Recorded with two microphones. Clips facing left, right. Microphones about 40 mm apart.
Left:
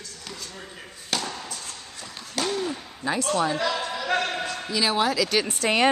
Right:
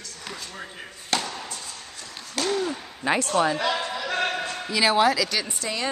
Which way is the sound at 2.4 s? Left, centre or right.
Centre.